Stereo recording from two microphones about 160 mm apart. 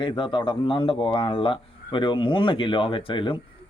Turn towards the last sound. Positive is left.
turn(degrees=30)  # may be behind; listen again after turning